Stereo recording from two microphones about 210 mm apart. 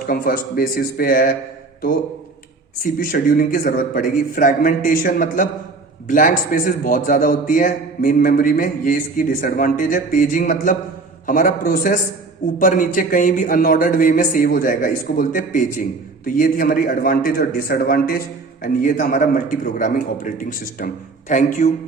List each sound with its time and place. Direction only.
0.1 s a man's voice: 45° left (ahead or behind)
2.8 s a man's voice: 45° left (ahead or behind)